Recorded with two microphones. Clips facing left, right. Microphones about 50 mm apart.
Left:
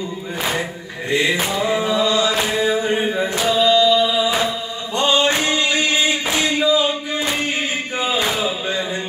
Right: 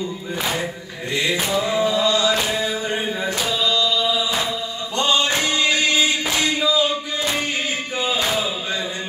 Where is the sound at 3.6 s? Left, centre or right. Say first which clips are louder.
Left 7 dB; left.